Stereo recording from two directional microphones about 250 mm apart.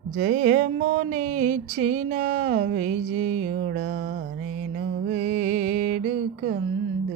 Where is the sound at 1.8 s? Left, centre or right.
Right.